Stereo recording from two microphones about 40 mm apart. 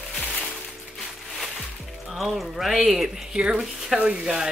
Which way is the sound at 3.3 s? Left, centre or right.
Right.